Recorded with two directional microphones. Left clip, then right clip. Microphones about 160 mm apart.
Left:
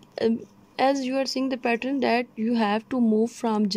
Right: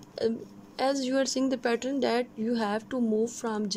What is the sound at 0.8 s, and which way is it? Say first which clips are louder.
A woman's voice: left 4 dB; 15° left (ahead or behind).